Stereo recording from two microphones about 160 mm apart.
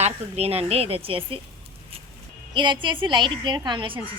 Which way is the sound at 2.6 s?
30° right (ahead or behind).